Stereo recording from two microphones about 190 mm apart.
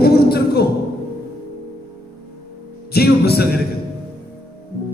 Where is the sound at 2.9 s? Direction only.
55° left (ahead or behind).